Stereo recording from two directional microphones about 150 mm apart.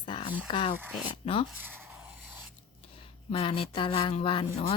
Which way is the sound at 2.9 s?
35° left (ahead or behind).